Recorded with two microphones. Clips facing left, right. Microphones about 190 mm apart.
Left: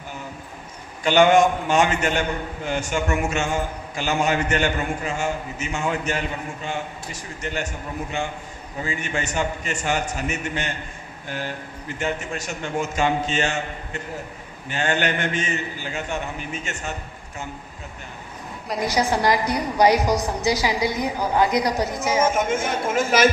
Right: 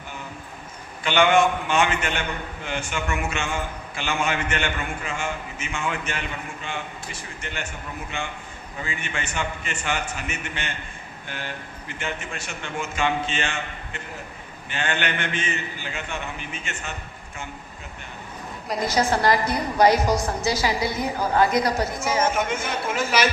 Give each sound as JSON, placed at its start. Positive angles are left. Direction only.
{"t": 1.0, "sound": "a man's voice", "side_deg": 40}
{"t": 18.8, "sound": "a woman's voice", "side_deg": 15}
{"t": 22.4, "sound": "a man's voice", "side_deg": 45}